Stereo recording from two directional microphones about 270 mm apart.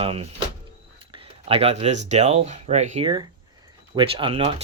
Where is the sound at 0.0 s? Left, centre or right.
Right.